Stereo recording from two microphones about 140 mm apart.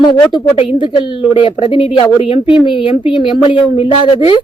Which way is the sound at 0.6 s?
40° left (ahead or behind).